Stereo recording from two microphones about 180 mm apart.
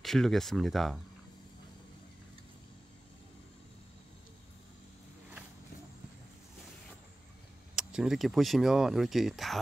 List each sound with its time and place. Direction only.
0.0 s speech: centre (ahead or behind)
7.7 s speech: 5° right (ahead or behind)